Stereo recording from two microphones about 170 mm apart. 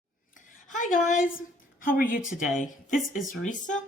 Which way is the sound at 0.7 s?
50° left (ahead or behind).